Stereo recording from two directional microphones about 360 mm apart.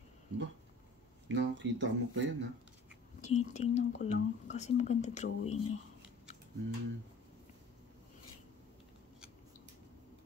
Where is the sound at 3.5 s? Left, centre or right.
Centre.